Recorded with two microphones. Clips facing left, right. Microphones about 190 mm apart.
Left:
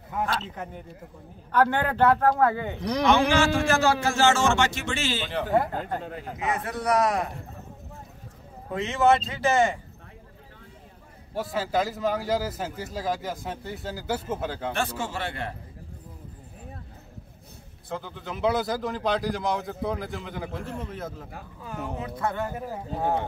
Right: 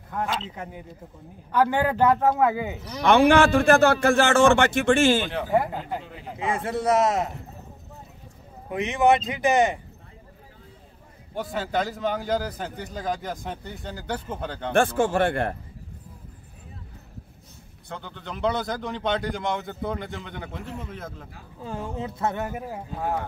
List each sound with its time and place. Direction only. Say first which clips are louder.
0.3 s a man's voice: even; 10° right (ahead or behind)
2.8 s speech: left 5 dB; 65° left (ahead or behind)
3.1 s a man's voice: right 6 dB; 60° right (ahead or behind)
5.3 s a man's voice: right 1 dB; 5° right (ahead or behind)
6.4 s speech: right 3 dB; 25° right (ahead or behind)
8.6 s a man's voice: right 1 dB; 15° right (ahead or behind)
11.3 s a man's voice: left 1 dB; centre (ahead or behind)
14.7 s speech: right 13 dB; 50° right (ahead or behind)
17.8 s a man's voice: left 2 dB; centre (ahead or behind)
21.6 s speech: right 2 dB; 30° right (ahead or behind)
22.9 s speech: left 2 dB; 30° left (ahead or behind)